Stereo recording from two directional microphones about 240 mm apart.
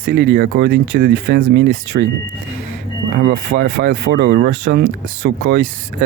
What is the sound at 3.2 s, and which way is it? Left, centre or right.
Speech, right.